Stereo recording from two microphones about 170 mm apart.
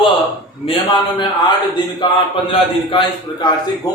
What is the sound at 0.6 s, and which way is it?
Speech, 35° left (ahead or behind).